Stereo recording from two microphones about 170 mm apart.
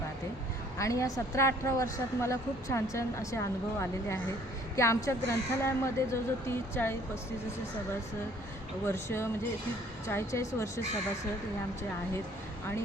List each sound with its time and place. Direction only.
0.8 s a woman's voice: 20° left (ahead or behind)
8.8 s a woman's voice: 15° left (ahead or behind)